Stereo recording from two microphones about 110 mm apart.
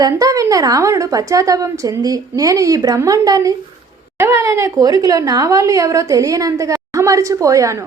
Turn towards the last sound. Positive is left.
turn(degrees=-30)  # may be behind; listen again after turning